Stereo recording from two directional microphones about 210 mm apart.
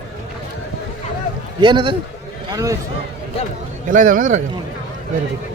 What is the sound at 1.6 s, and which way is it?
A man's voice, 25° right (ahead or behind).